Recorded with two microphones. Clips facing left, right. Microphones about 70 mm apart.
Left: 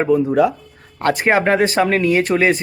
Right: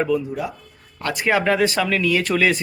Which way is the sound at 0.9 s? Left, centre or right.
Left.